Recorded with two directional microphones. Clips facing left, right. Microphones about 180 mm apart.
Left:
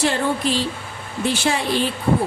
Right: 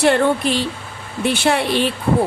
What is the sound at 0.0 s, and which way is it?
Speech, 60° right (ahead or behind).